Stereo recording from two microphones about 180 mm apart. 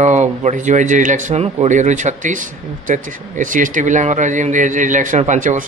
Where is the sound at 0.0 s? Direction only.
40° right (ahead or behind).